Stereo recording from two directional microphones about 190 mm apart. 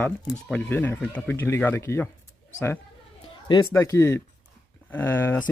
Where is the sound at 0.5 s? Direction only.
10° left (ahead or behind).